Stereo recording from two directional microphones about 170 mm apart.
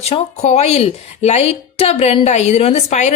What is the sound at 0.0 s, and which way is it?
A woman's voice, 40° left (ahead or behind).